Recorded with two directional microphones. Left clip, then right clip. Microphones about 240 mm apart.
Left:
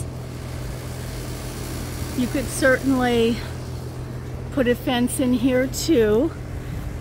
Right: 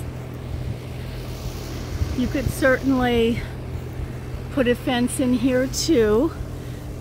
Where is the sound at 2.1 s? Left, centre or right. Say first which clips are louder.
Even; left.